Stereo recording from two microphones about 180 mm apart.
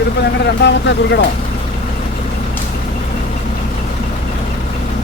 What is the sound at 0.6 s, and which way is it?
Speech, 75° left (ahead or behind).